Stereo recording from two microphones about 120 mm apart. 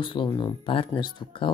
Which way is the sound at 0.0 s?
45° left (ahead or behind).